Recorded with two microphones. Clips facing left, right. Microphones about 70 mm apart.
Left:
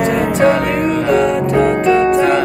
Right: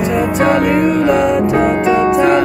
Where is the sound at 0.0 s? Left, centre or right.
Left.